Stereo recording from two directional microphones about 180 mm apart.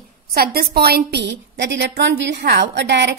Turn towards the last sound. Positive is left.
turn(degrees=-70)  # may be behind; listen again after turning